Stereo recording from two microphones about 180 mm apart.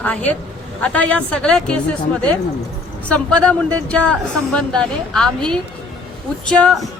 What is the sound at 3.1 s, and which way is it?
Speech, 5° left (ahead or behind).